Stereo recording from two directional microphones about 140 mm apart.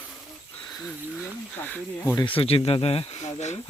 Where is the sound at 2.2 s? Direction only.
40° left (ahead or behind).